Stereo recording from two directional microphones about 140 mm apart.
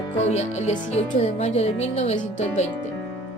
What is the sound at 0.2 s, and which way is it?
A woman's voice, 55° left (ahead or behind).